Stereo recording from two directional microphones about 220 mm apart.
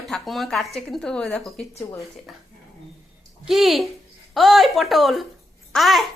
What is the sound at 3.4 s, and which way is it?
A woman's voice, centre (ahead or behind).